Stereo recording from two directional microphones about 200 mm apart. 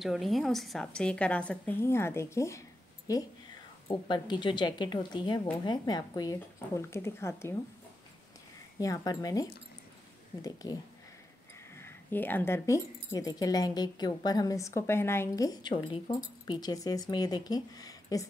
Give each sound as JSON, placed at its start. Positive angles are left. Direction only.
{"t": 0.0, "sound": "a woman's voice", "side_deg": 0}
{"t": 8.7, "sound": "a woman's voice", "side_deg": 15}
{"t": 11.8, "sound": "speech", "side_deg": 10}